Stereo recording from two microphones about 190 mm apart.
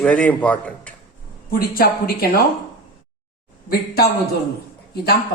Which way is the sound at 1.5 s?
50° left (ahead or behind).